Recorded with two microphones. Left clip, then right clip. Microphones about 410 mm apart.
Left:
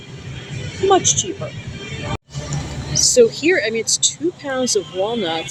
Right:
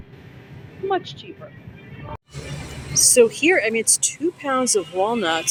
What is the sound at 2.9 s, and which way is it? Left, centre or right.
Speech, right.